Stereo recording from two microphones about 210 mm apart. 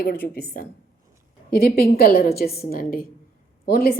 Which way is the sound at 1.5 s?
45° left (ahead or behind).